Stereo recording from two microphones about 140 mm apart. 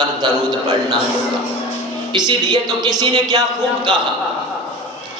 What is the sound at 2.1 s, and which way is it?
A woman's voice, 30° right (ahead or behind).